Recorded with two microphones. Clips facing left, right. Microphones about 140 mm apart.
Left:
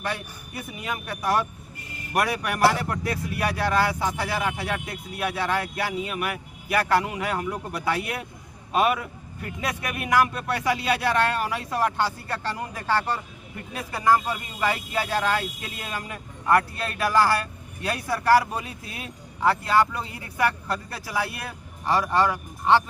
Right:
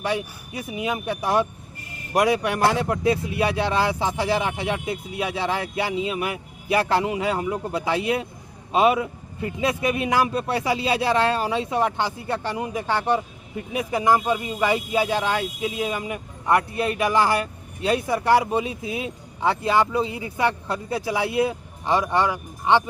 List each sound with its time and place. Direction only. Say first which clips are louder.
0.0 s a man's voice: right 5 dB; 15° right (ahead or behind)